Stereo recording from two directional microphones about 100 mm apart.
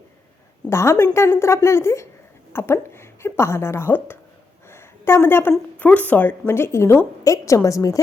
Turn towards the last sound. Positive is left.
turn(degrees=35)  # may be behind; listen again after turning